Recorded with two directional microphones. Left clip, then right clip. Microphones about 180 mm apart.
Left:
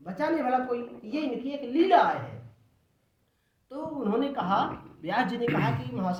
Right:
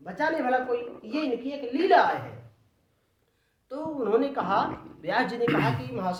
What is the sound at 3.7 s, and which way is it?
A woman's voice, 15° right (ahead or behind).